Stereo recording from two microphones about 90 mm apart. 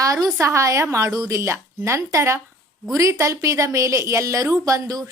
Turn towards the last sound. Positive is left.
turn(degrees=-40)  # may be behind; listen again after turning